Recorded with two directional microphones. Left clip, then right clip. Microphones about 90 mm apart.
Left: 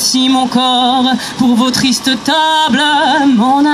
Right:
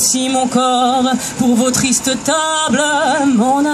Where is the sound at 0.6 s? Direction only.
35° left (ahead or behind).